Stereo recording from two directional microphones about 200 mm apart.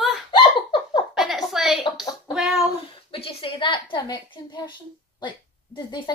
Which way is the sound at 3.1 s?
25° left (ahead or behind).